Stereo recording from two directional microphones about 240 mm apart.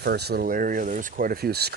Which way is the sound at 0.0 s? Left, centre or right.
Right.